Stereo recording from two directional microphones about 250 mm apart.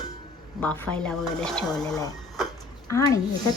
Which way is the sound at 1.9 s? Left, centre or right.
Centre.